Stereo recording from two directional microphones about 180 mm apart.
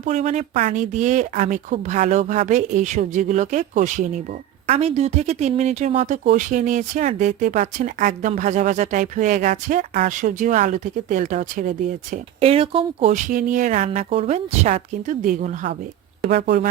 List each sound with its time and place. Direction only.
0.0 s speech: 40° right (ahead or behind)
12.1 s speech: 35° right (ahead or behind)
13.1 s a woman's voice: 45° right (ahead or behind)